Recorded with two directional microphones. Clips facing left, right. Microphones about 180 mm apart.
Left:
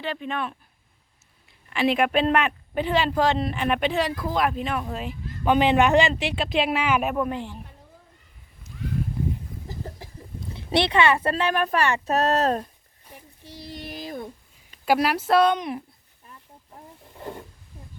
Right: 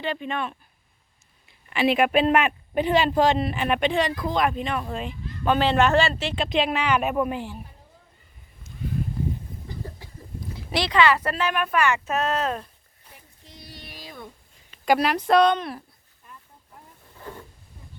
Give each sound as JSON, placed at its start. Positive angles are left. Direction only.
{"t": 0.0, "sound": "speech", "side_deg": 0}
{"t": 3.3, "sound": "speech", "side_deg": -5}
{"t": 6.3, "sound": "speech", "side_deg": 5}
{"t": 10.5, "sound": "speech", "side_deg": 25}
{"t": 13.7, "sound": "a sound", "side_deg": 50}
{"t": 14.8, "sound": "speech", "side_deg": 5}
{"t": 17.2, "sound": "a sound", "side_deg": 15}